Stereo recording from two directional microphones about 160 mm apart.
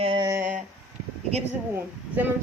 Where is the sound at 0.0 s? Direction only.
30° right (ahead or behind).